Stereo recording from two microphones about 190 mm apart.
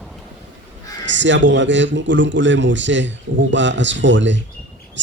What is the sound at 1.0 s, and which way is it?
A man's voice, 70° right (ahead or behind).